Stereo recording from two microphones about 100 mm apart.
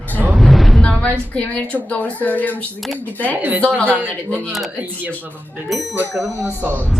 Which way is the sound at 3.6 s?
15° left (ahead or behind).